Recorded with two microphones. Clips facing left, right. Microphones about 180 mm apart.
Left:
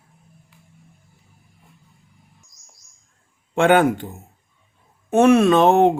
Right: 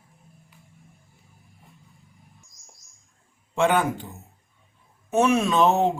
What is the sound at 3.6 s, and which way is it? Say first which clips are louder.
Speech: left 6 dB; 70° left (ahead or behind).